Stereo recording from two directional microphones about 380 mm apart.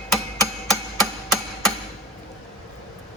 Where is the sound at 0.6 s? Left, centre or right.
Centre.